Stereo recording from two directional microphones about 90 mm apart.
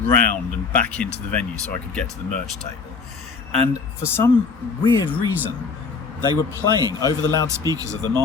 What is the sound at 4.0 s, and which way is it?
Speech, 25° left (ahead or behind).